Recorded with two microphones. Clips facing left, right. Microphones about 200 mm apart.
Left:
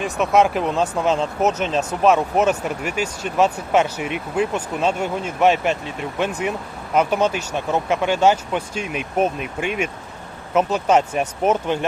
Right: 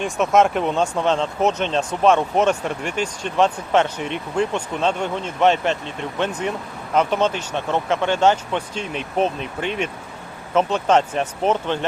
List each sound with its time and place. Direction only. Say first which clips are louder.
0.0 s speech: even; centre (ahead or behind)